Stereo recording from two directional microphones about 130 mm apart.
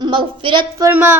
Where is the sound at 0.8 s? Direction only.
20° right (ahead or behind).